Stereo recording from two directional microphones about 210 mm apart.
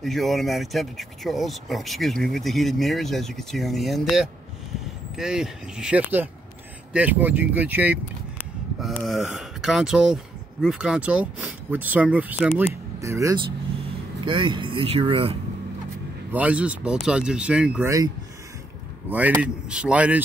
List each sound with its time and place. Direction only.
0.0 s speech: centre (ahead or behind); by 15.3 s 25° right (ahead or behind)
16.3 s speech: 5° right (ahead or behind)
17.8 s speech: 15° right (ahead or behind)